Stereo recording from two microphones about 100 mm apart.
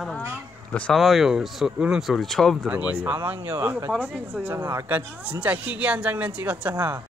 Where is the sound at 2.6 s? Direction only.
15° right (ahead or behind).